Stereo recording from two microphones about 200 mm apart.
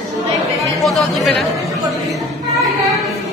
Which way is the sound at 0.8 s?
Centre (ahead or behind).